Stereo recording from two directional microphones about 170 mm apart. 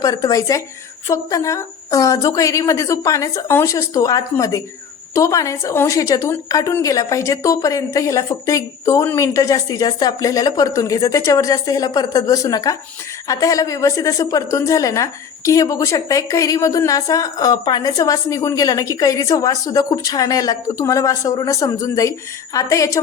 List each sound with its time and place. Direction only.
0.0 s a woman's voice: 20° left (ahead or behind)